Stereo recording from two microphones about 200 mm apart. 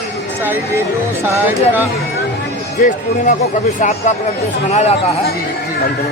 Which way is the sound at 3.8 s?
35° left (ahead or behind).